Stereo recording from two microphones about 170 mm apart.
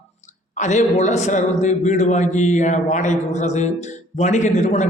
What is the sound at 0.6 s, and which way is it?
A man's voice, 45° left (ahead or behind).